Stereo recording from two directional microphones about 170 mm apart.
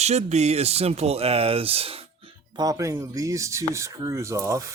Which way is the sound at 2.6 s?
20° right (ahead or behind).